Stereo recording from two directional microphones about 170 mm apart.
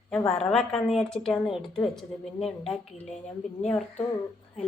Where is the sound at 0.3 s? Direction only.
5° left (ahead or behind).